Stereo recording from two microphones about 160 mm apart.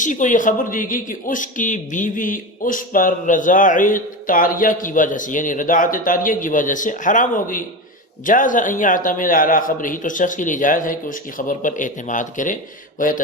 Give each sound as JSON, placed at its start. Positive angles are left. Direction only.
{"t": 0.0, "sound": "speech", "side_deg": 50}